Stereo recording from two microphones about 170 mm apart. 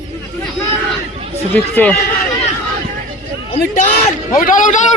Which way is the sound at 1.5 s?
10° left (ahead or behind).